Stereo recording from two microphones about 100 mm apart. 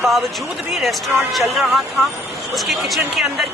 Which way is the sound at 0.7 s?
Centre (ahead or behind).